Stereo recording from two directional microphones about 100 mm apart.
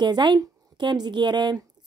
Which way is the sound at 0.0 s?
50° right (ahead or behind).